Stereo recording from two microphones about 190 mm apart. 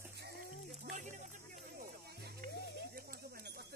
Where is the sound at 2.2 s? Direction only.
50° right (ahead or behind).